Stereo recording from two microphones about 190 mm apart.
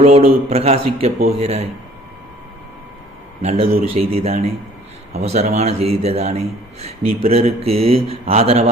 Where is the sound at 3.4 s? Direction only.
30° right (ahead or behind).